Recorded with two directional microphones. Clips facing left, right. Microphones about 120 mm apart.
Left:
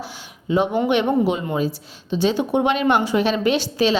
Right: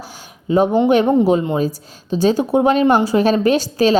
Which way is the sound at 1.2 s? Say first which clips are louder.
Right 5 dB; 40° right (ahead or behind).